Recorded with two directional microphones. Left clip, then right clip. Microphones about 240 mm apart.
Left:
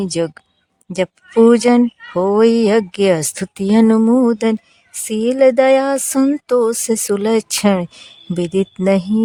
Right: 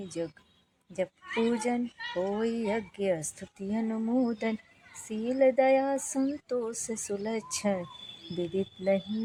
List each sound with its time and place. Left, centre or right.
0.2 s speech: left